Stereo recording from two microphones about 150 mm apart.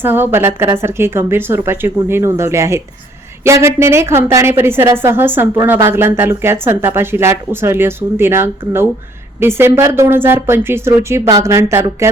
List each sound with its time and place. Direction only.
0.0 s speech: 15° right (ahead or behind)